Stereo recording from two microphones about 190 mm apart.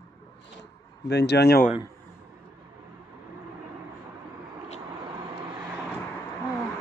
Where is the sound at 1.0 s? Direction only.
60° left (ahead or behind).